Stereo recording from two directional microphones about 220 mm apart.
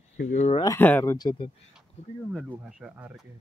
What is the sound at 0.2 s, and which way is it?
Speech, 30° left (ahead or behind).